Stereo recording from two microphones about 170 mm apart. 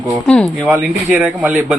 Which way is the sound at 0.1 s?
5° left (ahead or behind).